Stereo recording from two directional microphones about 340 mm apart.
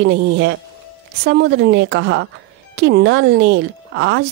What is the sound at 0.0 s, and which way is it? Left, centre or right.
A woman's voice, right.